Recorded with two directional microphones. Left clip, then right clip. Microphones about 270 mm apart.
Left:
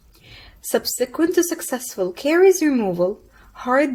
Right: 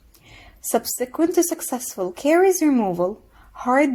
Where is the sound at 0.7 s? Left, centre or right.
Right.